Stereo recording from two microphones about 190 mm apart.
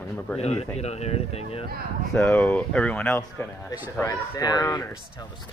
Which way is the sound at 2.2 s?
10° left (ahead or behind).